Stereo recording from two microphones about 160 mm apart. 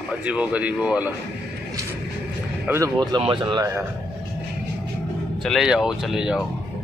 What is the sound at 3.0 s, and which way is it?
Speech, 30° right (ahead or behind).